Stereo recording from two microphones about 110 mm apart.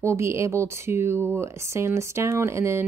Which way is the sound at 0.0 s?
25° right (ahead or behind).